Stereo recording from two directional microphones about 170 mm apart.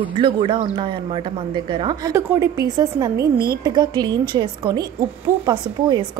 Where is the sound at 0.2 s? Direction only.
30° right (ahead or behind).